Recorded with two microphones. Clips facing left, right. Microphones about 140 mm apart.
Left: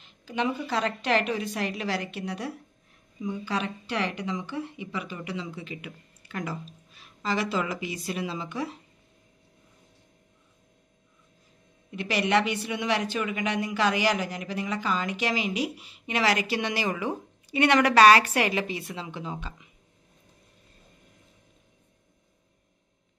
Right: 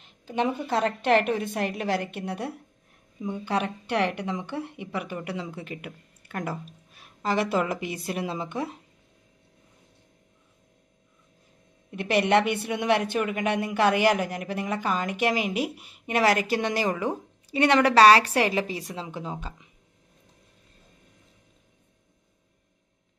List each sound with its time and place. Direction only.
0.0 s a sound: 55° right (ahead or behind)
0.7 s a woman's voice: 55° right (ahead or behind)
11.9 s a woman's voice: 55° right (ahead or behind); by 19.5 s 40° right (ahead or behind)